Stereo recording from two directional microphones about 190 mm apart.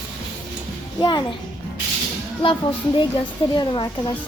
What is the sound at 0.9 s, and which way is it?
Speech, 25° left (ahead or behind).